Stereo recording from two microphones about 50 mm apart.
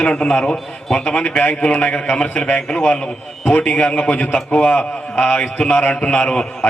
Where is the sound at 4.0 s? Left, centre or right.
Left.